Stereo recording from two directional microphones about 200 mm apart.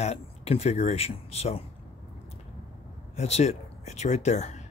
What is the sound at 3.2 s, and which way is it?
Speech, 35° left (ahead or behind).